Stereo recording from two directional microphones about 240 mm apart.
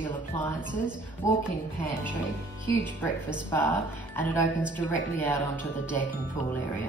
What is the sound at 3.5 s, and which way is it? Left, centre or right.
A woman's voice, centre.